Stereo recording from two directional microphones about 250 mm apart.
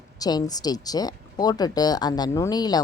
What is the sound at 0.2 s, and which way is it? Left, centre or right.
Speech, centre.